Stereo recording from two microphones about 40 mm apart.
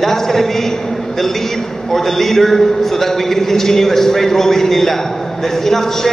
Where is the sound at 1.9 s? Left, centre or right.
Centre.